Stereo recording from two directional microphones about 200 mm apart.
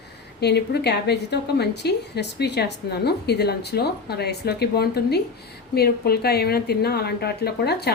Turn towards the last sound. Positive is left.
turn(degrees=55)  # may be behind; listen again after turning